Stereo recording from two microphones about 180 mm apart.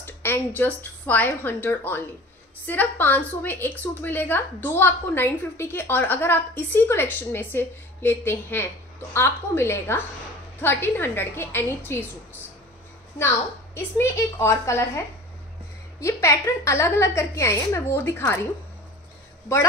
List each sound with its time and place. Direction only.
0.0 s a woman's voice: 10° left (ahead or behind)
13.7 s a woman's voice: 15° left (ahead or behind)
16.0 s a woman's voice: 15° left (ahead or behind)